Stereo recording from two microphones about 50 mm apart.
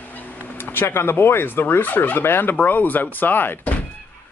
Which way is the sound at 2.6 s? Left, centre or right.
Left.